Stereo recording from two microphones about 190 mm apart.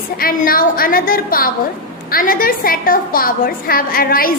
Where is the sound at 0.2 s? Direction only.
50° left (ahead or behind).